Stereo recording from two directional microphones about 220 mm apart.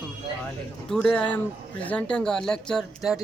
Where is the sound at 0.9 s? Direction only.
5° left (ahead or behind).